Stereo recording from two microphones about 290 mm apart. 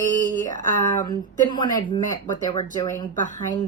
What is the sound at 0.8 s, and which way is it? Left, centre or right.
Speech, centre.